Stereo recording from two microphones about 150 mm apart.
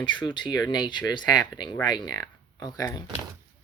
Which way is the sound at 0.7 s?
30° left (ahead or behind).